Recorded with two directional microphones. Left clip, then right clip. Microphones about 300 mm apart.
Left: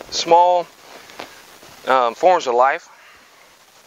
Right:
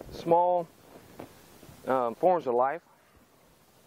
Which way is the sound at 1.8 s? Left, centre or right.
Centre.